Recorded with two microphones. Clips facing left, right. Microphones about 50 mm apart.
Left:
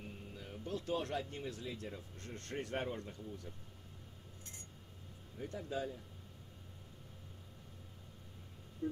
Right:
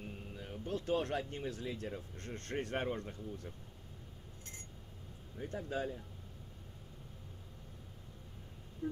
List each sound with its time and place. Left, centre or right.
0.4 s speech: right
5.4 s speech: right